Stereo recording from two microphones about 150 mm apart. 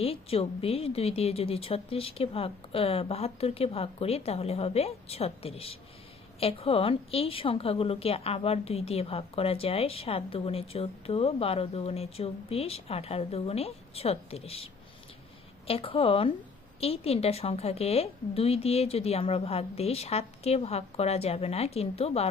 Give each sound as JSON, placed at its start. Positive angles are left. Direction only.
{"t": 0.0, "sound": "a woman's voice", "side_deg": 40}